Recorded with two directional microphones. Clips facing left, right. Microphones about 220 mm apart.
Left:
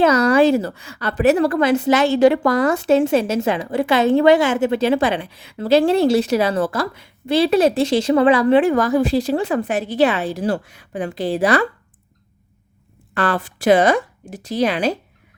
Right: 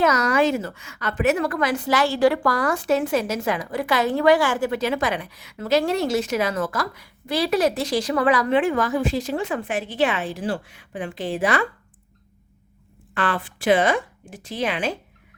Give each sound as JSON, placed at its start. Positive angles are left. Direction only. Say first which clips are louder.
{"t": 0.0, "sound": "a woman's voice", "louder": "left 6 dB", "side_deg": 30}
{"t": 13.1, "sound": "speech", "louder": "left 5 dB", "side_deg": 40}